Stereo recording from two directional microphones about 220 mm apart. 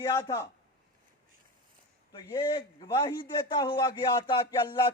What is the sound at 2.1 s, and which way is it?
A man's voice, 20° left (ahead or behind).